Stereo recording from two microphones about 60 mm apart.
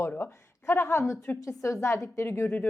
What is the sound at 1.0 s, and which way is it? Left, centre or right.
Speech, left.